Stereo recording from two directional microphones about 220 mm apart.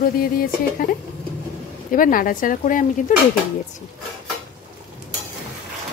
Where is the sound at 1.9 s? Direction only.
40° left (ahead or behind).